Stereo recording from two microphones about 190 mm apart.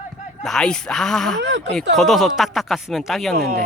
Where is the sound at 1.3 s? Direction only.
65° right (ahead or behind).